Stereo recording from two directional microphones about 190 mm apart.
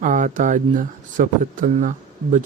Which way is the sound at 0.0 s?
45° right (ahead or behind).